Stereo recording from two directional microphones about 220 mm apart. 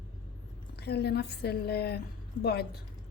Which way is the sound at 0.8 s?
45° left (ahead or behind).